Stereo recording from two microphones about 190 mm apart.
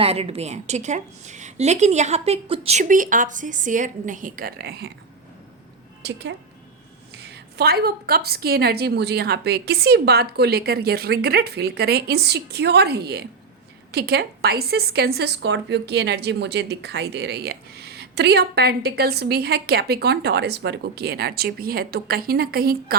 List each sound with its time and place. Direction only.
0.0 s a woman's voice: 30° right (ahead or behind); by 4.9 s 55° right (ahead or behind)
6.0 s a woman's voice: 65° right (ahead or behind)